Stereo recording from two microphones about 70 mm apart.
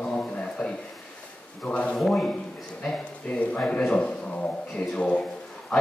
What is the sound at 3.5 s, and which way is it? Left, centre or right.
A man's voice, centre.